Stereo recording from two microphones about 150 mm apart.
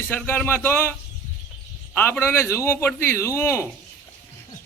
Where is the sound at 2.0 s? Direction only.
15° left (ahead or behind).